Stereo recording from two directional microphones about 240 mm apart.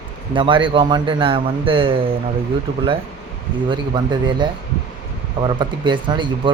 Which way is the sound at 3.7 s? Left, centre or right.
Centre.